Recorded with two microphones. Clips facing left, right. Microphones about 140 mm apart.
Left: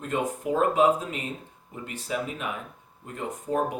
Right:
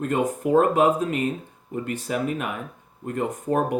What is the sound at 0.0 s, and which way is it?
Speech, 55° right (ahead or behind).